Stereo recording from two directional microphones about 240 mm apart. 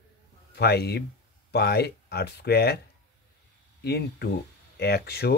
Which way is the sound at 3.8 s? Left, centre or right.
Left.